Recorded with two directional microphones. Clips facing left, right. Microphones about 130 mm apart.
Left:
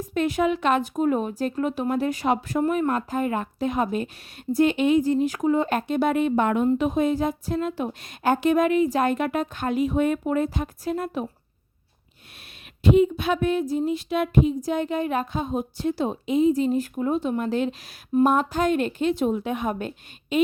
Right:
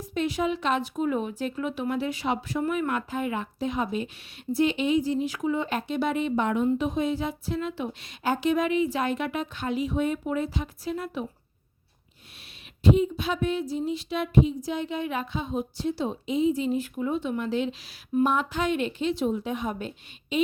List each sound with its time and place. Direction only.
0.0 s speech: 55° left (ahead or behind)
12.8 s speech: 65° left (ahead or behind)
20.3 s a sound: 50° left (ahead or behind)